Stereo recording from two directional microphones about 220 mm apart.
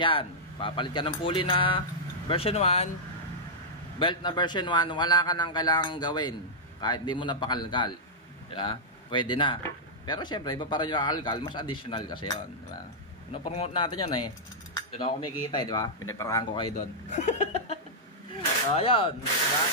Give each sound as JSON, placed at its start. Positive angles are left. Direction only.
{"t": 0.0, "sound": "speech", "side_deg": 25}
{"t": 4.0, "sound": "speech", "side_deg": 20}
{"t": 16.7, "sound": "speech", "side_deg": 35}
{"t": 18.8, "sound": "speech", "side_deg": 25}